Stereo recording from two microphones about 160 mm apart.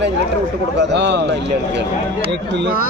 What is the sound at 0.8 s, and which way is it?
A man's voice, 90° right.